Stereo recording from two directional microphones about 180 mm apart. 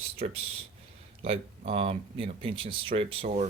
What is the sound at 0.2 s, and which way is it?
Speech, 45° right (ahead or behind).